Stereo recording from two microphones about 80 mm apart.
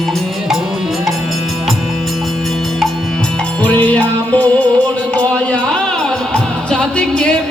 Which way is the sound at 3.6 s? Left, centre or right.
Centre.